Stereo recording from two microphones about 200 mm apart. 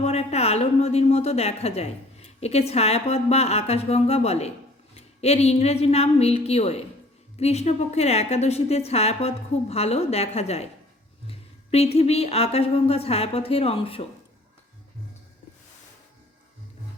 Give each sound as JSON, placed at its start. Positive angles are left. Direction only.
{"t": 0.0, "sound": "a woman's voice", "side_deg": 30}